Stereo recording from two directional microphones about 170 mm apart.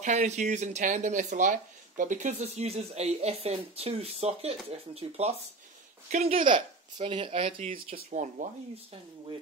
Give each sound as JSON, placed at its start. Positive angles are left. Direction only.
{"t": 0.0, "sound": "speech", "side_deg": -45}
{"t": 7.5, "sound": "speech", "side_deg": -50}